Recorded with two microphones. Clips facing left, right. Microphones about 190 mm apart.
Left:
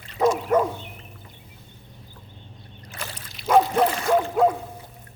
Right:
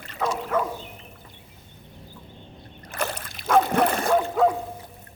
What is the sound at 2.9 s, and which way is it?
Boat, 55° right (ahead or behind).